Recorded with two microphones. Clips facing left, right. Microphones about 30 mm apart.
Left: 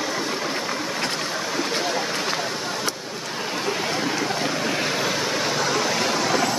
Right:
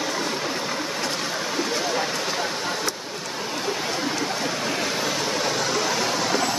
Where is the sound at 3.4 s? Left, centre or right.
Centre.